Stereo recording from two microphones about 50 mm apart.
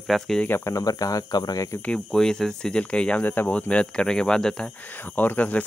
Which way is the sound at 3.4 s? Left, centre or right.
Left.